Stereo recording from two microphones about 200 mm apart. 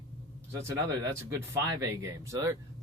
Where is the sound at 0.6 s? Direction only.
15° right (ahead or behind).